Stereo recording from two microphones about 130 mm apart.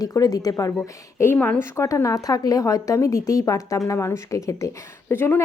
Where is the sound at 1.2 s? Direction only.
15° left (ahead or behind).